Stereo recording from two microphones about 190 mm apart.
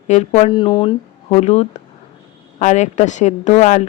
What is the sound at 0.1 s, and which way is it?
Speech, 35° left (ahead or behind).